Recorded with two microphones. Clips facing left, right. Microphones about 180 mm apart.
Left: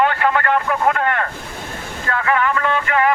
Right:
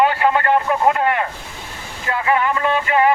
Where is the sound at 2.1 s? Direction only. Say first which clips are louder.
Right 1 dB; 20° right (ahead or behind).